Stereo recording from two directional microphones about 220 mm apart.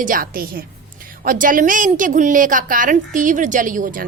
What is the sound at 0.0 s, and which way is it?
A woman's voice, 40° right (ahead or behind).